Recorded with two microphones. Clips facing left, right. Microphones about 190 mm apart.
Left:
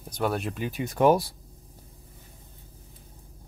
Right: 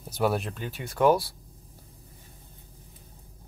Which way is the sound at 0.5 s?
15° left (ahead or behind).